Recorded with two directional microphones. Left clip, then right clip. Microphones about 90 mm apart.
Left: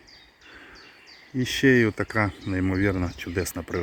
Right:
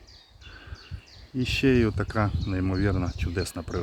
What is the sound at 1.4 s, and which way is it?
Speech, 15° right (ahead or behind).